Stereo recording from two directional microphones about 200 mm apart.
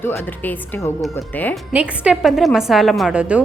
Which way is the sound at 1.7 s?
5° right (ahead or behind).